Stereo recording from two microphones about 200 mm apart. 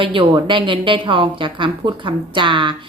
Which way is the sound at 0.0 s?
25° right (ahead or behind).